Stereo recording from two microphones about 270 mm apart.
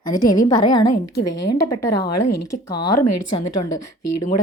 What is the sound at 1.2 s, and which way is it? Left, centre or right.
A woman's voice, left.